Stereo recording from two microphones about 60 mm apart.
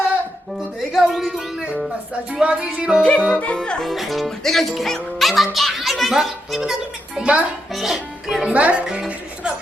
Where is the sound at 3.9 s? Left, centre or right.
Centre.